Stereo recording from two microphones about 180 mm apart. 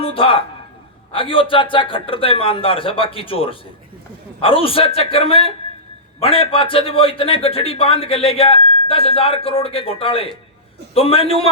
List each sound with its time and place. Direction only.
0.0 s a man's voice: 30° left (ahead or behind)